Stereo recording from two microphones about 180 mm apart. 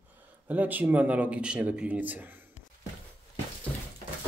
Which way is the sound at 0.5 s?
10° right (ahead or behind).